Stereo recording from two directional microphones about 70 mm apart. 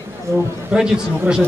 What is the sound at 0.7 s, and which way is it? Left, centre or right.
Speech, centre.